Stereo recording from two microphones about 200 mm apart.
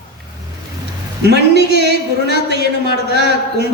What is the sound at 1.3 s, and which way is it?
A man's voice, 55° right (ahead or behind).